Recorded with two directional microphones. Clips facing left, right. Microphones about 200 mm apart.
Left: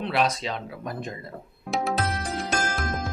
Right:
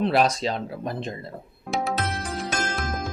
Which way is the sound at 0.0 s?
40° right (ahead or behind).